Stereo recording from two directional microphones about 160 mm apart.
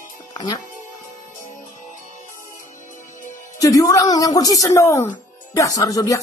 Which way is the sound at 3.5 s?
20° left (ahead or behind).